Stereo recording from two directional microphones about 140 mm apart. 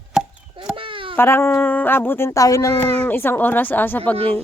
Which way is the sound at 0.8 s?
40° right (ahead or behind).